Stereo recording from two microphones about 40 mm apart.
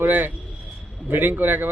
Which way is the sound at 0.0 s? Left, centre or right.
Right.